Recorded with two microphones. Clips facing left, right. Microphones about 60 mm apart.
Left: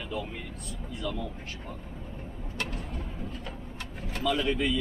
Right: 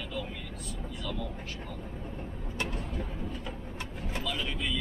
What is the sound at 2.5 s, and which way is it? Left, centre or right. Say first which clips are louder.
Vehicle: even; right.